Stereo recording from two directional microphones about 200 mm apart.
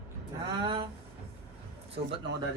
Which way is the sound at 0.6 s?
25° right (ahead or behind).